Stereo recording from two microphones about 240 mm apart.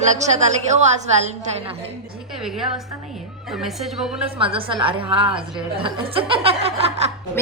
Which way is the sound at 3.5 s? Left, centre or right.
Centre.